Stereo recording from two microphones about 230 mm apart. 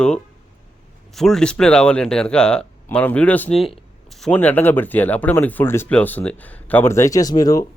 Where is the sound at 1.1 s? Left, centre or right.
Centre.